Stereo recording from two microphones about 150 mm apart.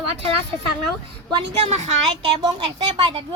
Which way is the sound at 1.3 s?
45° right (ahead or behind).